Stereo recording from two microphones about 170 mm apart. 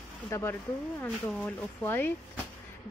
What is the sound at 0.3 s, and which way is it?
Speech, 15° left (ahead or behind).